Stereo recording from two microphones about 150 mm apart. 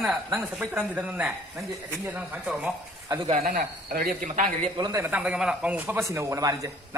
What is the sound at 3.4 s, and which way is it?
Speech, 80° right.